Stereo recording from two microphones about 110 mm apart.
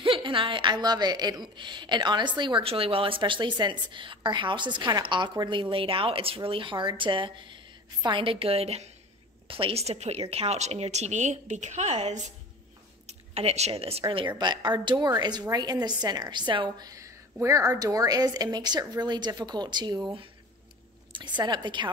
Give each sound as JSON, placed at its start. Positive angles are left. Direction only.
{"t": 0.0, "sound": "a woman's voice", "side_deg": -50}
{"t": 13.0, "sound": "speech", "side_deg": -65}
{"t": 14.4, "sound": "a woman's voice", "side_deg": -40}